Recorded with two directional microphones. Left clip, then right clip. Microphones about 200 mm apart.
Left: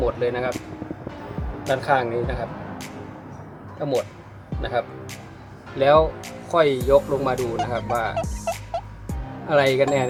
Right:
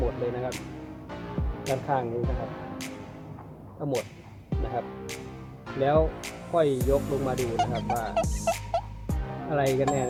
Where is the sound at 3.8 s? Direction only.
Centre (ahead or behind).